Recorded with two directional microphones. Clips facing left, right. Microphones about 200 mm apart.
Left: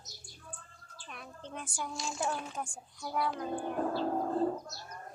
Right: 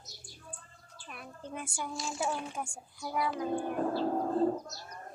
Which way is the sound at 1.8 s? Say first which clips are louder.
Even; centre (ahead or behind).